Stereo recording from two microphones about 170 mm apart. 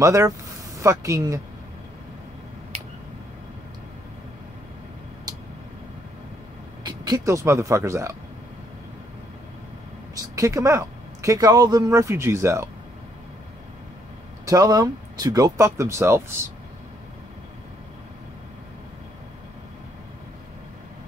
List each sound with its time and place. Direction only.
0.0 s speech: 15° right (ahead or behind)
6.8 s speech: 25° right (ahead or behind)
10.1 s speech: 20° right (ahead or behind)
14.4 s speech: 20° right (ahead or behind)